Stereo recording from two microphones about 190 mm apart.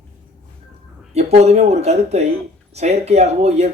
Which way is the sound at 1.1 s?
35° right (ahead or behind).